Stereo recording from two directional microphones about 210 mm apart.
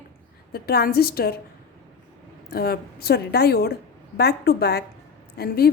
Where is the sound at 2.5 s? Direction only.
45° left (ahead or behind).